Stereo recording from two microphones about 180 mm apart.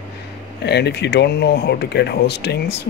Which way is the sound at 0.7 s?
70° left (ahead or behind).